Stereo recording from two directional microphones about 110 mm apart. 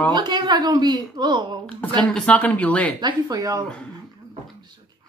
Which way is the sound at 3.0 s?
40° right (ahead or behind).